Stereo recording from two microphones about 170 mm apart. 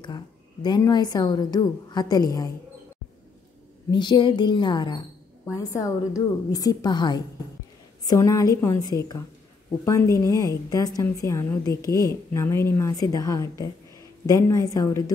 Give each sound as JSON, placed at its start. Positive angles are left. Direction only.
{"t": 0.0, "sound": "a woman's voice", "side_deg": 25}
{"t": 3.9, "sound": "a woman's voice", "side_deg": 25}